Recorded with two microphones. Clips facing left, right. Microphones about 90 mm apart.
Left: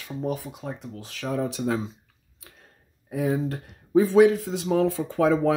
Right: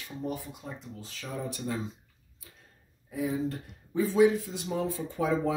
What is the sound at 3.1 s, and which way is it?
Speech, 70° left (ahead or behind).